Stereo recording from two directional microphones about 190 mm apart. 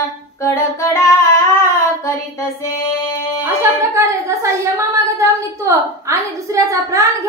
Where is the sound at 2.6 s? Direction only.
15° left (ahead or behind).